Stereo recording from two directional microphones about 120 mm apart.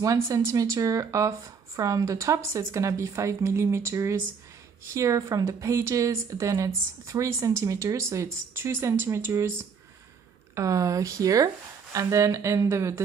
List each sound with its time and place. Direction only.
0.0 s speech: 30° right (ahead or behind)
10.5 s speech: 25° right (ahead or behind)